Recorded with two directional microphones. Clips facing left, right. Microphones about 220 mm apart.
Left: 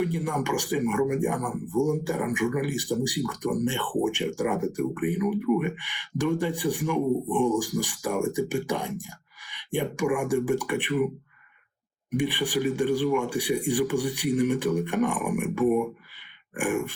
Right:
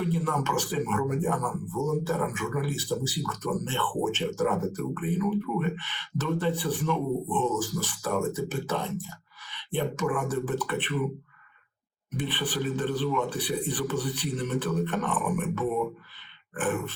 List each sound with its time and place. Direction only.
0.0 s speech: 15° left (ahead or behind)
12.1 s speech: 15° left (ahead or behind)